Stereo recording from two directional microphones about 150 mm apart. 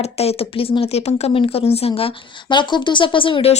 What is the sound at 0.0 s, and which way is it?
Speech, 45° left (ahead or behind).